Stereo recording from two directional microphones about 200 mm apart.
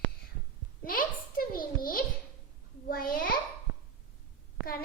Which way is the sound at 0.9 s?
45° left (ahead or behind).